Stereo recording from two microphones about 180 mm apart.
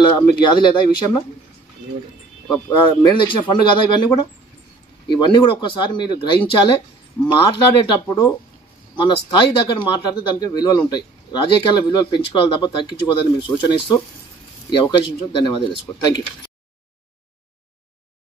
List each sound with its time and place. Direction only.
0.0 s speech: 25° left (ahead or behind)
2.4 s speech: 5° left (ahead or behind)
3.0 s speech: 25° left (ahead or behind)